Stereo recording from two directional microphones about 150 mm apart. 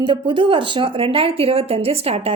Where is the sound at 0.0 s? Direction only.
30° right (ahead or behind).